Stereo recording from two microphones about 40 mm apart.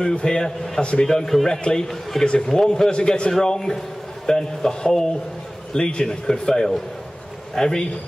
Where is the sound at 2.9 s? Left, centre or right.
Left.